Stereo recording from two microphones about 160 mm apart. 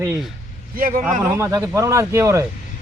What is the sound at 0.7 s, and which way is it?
Speech, 60° right (ahead or behind).